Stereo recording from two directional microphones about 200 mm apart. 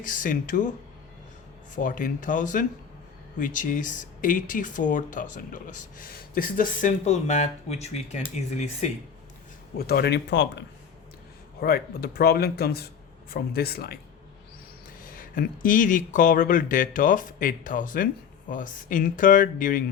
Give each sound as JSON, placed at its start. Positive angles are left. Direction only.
{"t": 0.0, "sound": "speech", "side_deg": 40}
{"t": 1.7, "sound": "speech", "side_deg": 40}
{"t": 9.7, "sound": "speech", "side_deg": 50}
{"t": 11.6, "sound": "speech", "side_deg": 50}
{"t": 15.1, "sound": "speech", "side_deg": 45}